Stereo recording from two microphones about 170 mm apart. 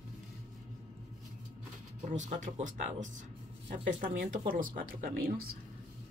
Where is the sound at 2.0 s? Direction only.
45° right (ahead or behind).